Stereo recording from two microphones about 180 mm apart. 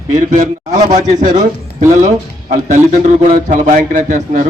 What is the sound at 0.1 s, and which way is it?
A man's voice, 45° right (ahead or behind).